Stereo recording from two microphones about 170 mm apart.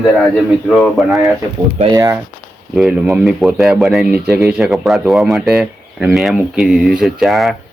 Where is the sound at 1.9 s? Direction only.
25° right (ahead or behind).